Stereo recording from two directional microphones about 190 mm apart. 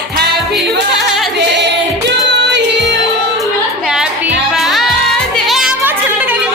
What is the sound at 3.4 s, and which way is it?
Music, centre (ahead or behind).